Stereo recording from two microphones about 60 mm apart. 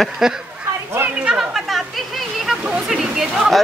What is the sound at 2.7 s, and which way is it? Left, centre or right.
Speech, centre.